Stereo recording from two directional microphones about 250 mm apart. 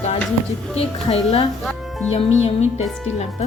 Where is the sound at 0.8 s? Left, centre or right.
Left.